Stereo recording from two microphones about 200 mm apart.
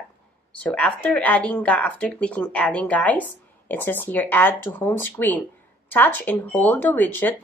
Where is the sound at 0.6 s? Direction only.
5° left (ahead or behind).